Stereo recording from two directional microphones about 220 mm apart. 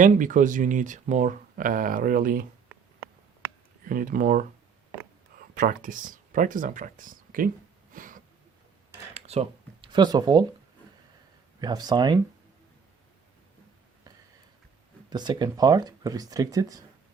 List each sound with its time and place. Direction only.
0.0 s speech: 35° right (ahead or behind)
3.8 s speech: 40° right (ahead or behind)
5.5 s speech: 40° right (ahead or behind)
7.9 s a sound: 35° right (ahead or behind)
9.1 s speech: 30° right (ahead or behind)
11.6 s speech: 20° right (ahead or behind)
15.1 s speech: 20° right (ahead or behind)